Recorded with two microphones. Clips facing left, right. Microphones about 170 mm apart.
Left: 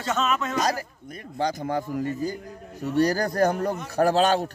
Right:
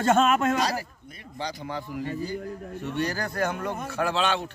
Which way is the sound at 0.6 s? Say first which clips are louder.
Left 2 dB; 45° left (ahead or behind).